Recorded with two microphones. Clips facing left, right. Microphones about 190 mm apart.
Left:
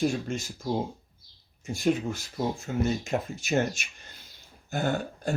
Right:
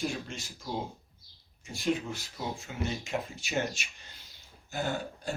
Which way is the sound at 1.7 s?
45° left (ahead or behind).